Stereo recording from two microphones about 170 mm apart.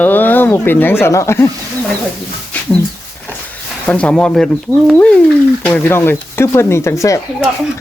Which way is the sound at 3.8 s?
5° left (ahead or behind).